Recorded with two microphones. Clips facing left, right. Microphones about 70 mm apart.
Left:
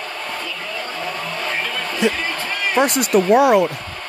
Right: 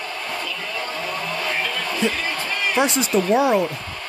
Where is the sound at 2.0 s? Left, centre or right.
Left.